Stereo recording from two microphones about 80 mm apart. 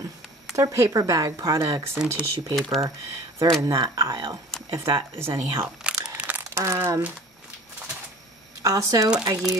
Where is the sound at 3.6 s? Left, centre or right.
Right.